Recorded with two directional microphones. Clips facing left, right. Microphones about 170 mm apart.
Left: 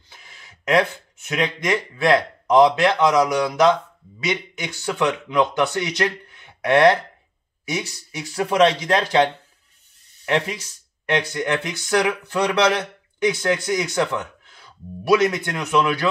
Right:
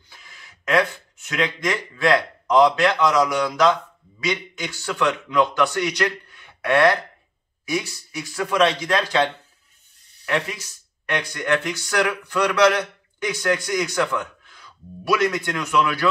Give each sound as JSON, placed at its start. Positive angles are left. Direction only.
{"t": 0.7, "sound": "speech", "side_deg": 20}
{"t": 11.1, "sound": "speech", "side_deg": 20}